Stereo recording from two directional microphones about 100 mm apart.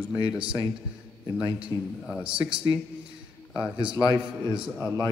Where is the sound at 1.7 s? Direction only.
35° right (ahead or behind).